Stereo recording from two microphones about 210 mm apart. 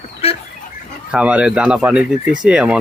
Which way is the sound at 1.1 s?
5° right (ahead or behind).